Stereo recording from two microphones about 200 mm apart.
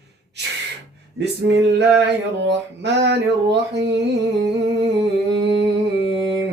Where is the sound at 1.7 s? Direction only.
60° right (ahead or behind).